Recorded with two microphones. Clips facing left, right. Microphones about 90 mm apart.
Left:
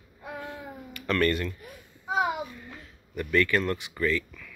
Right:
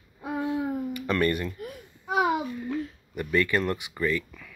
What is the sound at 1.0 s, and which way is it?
Speech, 20° right (ahead or behind).